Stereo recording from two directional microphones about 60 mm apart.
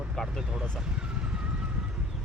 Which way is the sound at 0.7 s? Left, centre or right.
Centre.